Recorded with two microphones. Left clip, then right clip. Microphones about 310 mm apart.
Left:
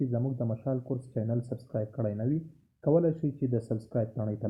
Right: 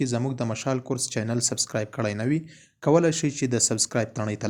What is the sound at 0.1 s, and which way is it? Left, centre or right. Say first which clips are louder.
Speech: right 5 dB; right.